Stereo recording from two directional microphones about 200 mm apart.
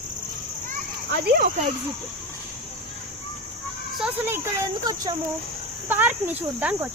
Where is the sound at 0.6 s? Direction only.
50° right (ahead or behind).